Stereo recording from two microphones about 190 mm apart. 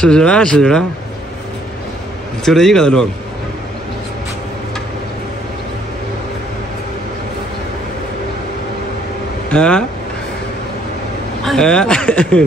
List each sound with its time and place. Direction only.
0.0 s speech: 5° left (ahead or behind)
2.4 s speech: centre (ahead or behind)
9.5 s speech: 5° left (ahead or behind)
11.4 s speech: 5° left (ahead or behind)